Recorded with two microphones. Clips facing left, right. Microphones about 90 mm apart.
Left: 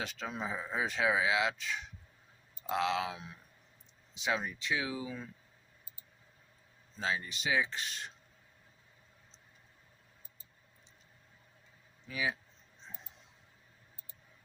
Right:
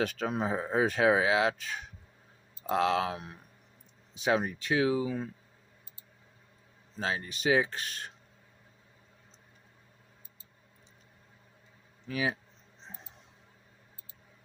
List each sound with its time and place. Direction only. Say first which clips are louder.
0.0 s speech: right 8 dB; 50° right (ahead or behind)
4.4 s speech: right 7 dB; 50° right (ahead or behind)
7.2 s speech: right 10 dB; 45° right (ahead or behind)
12.0 s speech: right 4 dB; 45° right (ahead or behind)